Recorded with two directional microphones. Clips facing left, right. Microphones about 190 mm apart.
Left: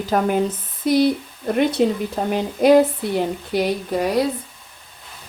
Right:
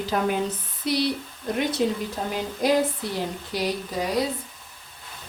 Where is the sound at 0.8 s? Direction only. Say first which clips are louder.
Left 8 dB; 50° left (ahead or behind).